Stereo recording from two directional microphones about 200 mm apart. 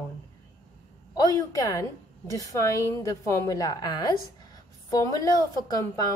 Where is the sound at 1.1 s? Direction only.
15° left (ahead or behind).